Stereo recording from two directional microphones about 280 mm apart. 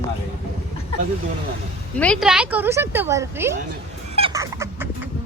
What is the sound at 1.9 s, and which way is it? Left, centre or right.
Speech, centre.